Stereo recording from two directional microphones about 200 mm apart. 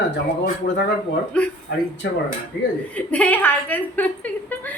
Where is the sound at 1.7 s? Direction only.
60° left (ahead or behind).